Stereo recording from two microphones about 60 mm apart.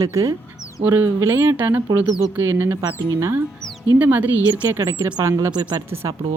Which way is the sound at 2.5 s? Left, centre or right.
Right.